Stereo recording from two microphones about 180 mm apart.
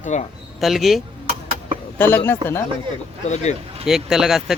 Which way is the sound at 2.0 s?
10° left (ahead or behind).